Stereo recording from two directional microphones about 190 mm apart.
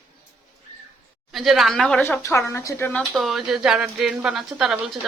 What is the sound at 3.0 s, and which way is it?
A woman's voice, centre (ahead or behind).